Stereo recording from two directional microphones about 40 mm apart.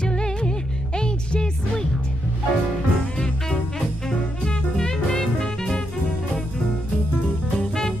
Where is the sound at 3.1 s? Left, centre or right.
Left.